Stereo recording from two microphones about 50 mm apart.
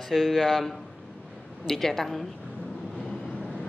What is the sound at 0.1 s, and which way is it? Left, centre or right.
A man's voice, centre.